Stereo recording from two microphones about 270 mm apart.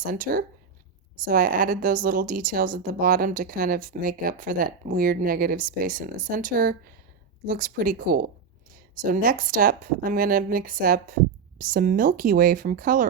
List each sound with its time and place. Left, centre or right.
0.0 s a woman's voice: right